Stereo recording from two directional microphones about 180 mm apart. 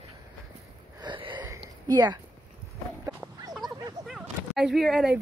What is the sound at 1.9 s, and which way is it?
Speech, 25° right (ahead or behind).